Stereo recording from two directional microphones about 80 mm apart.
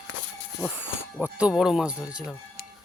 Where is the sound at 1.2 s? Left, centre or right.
Centre.